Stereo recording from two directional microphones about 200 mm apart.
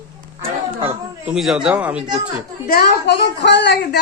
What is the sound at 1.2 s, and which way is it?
Speech, centre (ahead or behind).